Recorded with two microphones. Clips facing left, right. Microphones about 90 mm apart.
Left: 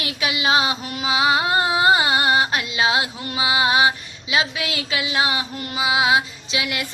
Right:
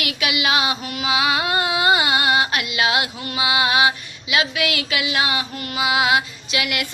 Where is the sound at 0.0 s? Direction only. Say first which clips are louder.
Right 1 dB; 30° left (ahead or behind).